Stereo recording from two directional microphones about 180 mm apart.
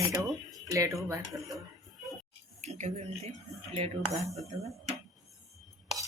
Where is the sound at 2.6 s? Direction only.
40° right (ahead or behind).